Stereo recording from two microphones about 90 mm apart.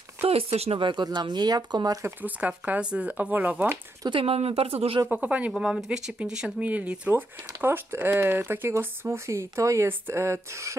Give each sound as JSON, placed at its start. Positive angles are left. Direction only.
{"t": 0.2, "sound": "speech", "side_deg": -90}
{"t": 2.0, "sound": "speech", "side_deg": -20}
{"t": 4.1, "sound": "speech", "side_deg": -90}
{"t": 5.0, "sound": "speech", "side_deg": -20}
{"t": 5.5, "sound": "speech", "side_deg": 0}